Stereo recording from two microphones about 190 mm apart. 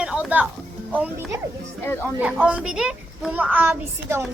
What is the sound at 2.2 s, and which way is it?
A woman's voice, 5° right (ahead or behind).